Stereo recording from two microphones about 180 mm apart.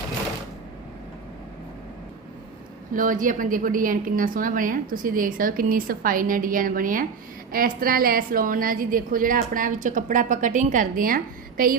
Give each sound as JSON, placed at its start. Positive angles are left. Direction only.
{"t": 2.9, "sound": "a woman's voice", "side_deg": -50}